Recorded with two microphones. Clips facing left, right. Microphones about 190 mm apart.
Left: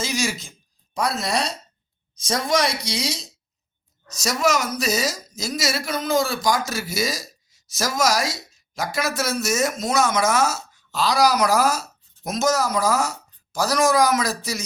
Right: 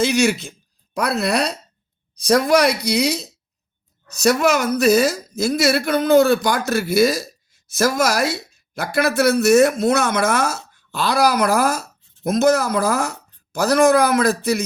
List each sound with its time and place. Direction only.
0.0 s a woman's voice: 60° right (ahead or behind)